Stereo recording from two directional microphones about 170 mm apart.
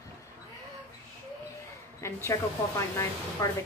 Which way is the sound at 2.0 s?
15° left (ahead or behind).